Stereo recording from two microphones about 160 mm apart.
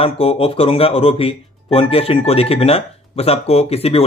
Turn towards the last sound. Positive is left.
turn(degrees=40)  # may be behind; listen again after turning